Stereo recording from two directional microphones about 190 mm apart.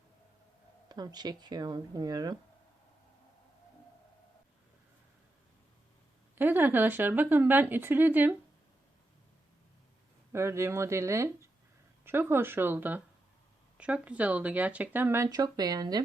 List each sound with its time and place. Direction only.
0.9 s speech: 20° right (ahead or behind)
6.3 s speech: 10° right (ahead or behind)
10.3 s speech: 15° right (ahead or behind)